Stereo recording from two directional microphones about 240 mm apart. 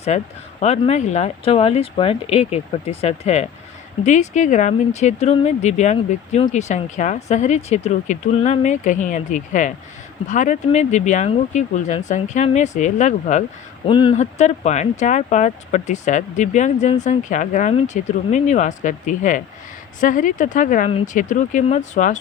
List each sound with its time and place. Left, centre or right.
0.1 s speech: left